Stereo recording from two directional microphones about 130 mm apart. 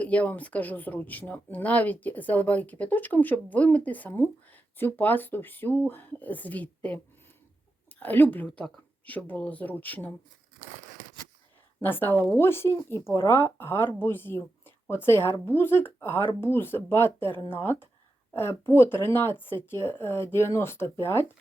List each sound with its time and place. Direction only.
0.0 s speech: 10° left (ahead or behind)
11.8 s speech: 15° left (ahead or behind)